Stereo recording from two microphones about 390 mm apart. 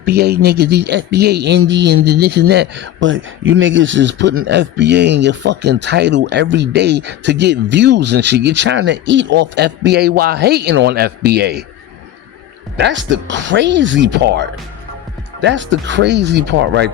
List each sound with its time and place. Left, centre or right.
0.0 s speech: right
12.7 s speech: right